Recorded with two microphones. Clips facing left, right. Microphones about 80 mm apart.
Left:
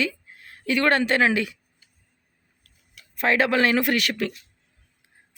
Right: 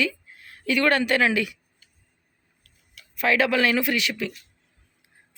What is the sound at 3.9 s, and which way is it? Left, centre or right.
Speech, left.